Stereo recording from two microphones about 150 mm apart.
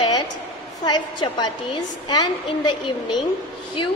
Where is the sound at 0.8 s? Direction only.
30° left (ahead or behind).